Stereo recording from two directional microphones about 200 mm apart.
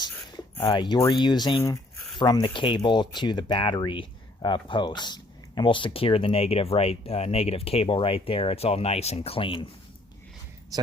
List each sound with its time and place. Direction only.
0.0 s speech: 15° left (ahead or behind)